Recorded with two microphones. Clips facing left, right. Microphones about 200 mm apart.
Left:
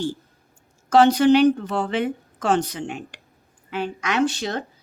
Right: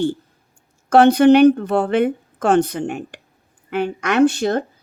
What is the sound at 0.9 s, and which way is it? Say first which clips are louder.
A woman's voice: right 4 dB; 60° right (ahead or behind).